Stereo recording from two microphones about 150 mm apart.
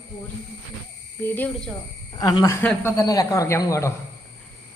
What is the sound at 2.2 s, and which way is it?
Speech, 25° left (ahead or behind).